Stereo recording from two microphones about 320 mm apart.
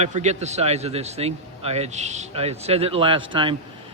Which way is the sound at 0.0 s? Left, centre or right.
Right.